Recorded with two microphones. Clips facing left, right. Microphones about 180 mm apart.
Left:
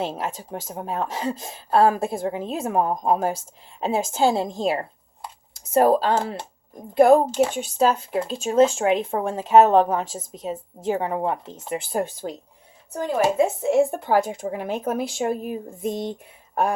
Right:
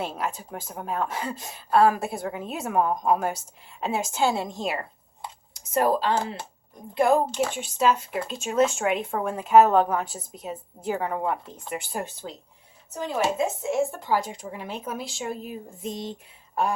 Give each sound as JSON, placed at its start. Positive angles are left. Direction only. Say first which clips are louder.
{"t": 0.0, "sound": "a woman's voice", "louder": "left 3 dB", "side_deg": 25}
{"t": 12.2, "sound": "speech", "louder": "left 7 dB", "side_deg": 45}
{"t": 13.6, "sound": "speech", "louder": "left 6 dB", "side_deg": 65}